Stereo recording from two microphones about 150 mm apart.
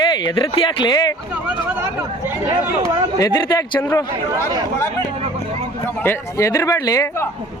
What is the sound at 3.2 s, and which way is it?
Speech, 20° left (ahead or behind).